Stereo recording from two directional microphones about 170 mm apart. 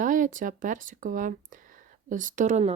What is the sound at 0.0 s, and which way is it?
A woman's voice, 50° right (ahead or behind).